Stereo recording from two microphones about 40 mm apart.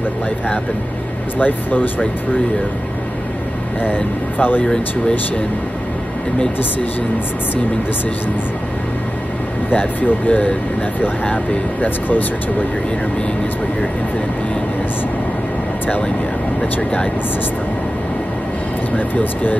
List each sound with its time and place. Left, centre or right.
1.4 s speech: left
3.8 s speech: left
9.7 s speech: left
11.8 s speech: left
18.9 s speech: left